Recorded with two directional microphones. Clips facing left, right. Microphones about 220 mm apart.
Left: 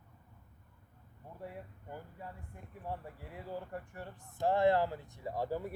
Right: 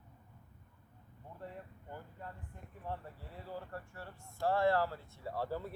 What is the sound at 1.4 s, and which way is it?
Speech, 10° left (ahead or behind).